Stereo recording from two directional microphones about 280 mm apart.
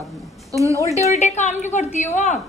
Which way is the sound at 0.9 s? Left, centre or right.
Left.